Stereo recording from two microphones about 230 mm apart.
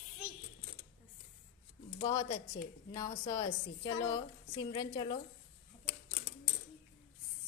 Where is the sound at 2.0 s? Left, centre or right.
Centre.